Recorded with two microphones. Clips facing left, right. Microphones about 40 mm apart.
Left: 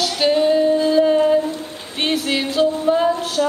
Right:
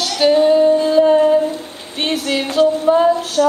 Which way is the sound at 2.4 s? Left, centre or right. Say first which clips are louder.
Right 5 dB; right.